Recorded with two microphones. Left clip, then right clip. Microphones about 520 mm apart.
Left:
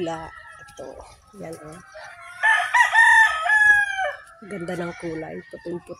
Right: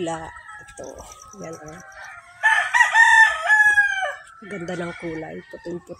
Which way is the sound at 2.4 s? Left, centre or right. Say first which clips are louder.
Right 1 dB; centre.